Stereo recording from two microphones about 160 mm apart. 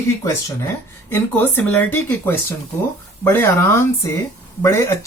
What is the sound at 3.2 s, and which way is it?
Speech, 15° left (ahead or behind).